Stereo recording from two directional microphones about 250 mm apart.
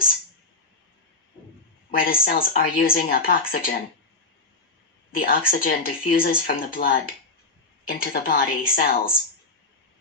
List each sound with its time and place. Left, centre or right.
1.9 s speech: left
5.1 s speech: left